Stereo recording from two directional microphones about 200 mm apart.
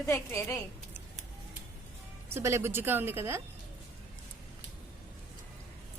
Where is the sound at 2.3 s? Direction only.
15° right (ahead or behind).